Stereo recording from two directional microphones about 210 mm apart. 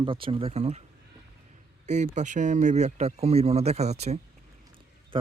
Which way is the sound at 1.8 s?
35° right (ahead or behind).